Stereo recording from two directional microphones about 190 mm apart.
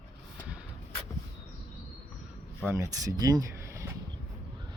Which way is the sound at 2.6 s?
15° right (ahead or behind).